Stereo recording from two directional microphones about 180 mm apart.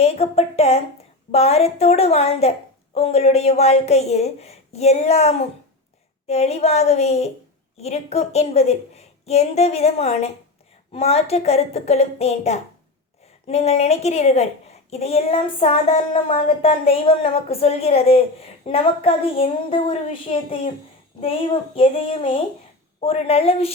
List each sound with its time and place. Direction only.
0.0 s a woman's voice: 35° left (ahead or behind)